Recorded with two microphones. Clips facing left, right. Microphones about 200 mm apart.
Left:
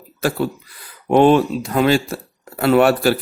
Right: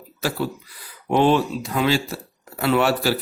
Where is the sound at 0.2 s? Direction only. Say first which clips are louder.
Left 5 dB; 55° left (ahead or behind).